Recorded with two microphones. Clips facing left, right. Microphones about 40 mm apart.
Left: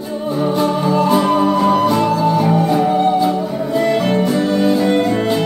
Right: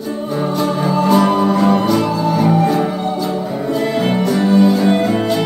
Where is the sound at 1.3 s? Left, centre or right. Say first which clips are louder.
Even; centre.